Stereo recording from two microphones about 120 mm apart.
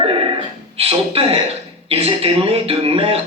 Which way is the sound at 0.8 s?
50° right (ahead or behind).